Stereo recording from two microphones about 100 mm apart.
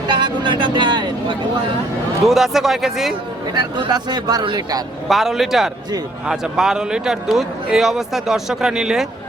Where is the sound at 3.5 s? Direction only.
45° right (ahead or behind).